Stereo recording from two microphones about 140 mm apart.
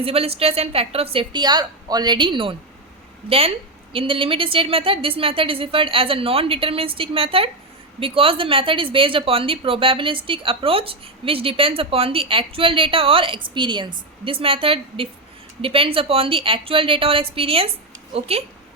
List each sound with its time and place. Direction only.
0.0 s a woman's voice: 45° right (ahead or behind)